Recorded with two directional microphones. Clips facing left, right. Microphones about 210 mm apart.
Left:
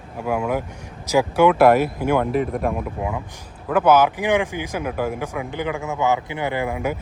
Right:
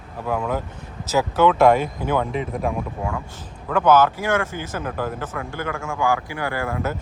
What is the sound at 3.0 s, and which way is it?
Speech, 15° left (ahead or behind).